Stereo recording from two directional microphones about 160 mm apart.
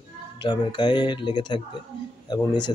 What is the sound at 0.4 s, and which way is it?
Speech, 30° left (ahead or behind).